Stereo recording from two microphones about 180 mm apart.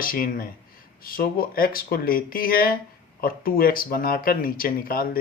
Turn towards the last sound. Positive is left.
turn(degrees=55)  # may be behind; listen again after turning